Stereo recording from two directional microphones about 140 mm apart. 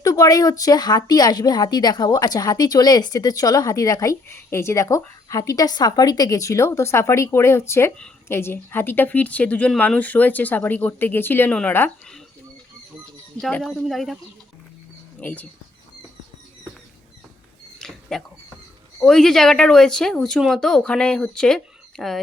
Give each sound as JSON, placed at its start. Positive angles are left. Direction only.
{"t": 0.0, "sound": "a woman's voice", "side_deg": 25}
{"t": 13.4, "sound": "speech", "side_deg": 5}
{"t": 15.2, "sound": "a woman's voice", "side_deg": 10}
{"t": 17.7, "sound": "a sound", "side_deg": 5}
{"t": 19.0, "sound": "speech", "side_deg": 5}